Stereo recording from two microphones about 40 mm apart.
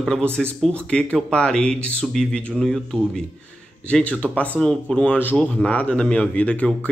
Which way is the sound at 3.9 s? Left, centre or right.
Left.